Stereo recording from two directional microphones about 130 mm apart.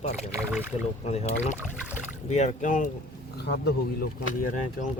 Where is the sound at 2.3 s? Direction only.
65° left (ahead or behind); by 2.9 s 85° left.